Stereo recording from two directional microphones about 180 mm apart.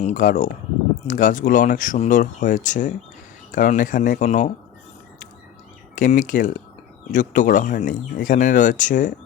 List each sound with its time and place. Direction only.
0.0 s speech: 45° left (ahead or behind)
6.0 s speech: 45° left (ahead or behind)